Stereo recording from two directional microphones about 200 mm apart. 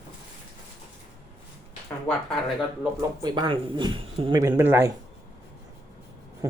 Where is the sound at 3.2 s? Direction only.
20° right (ahead or behind).